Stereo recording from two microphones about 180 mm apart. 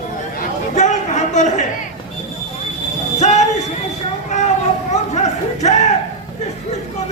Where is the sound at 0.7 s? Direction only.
40° left (ahead or behind).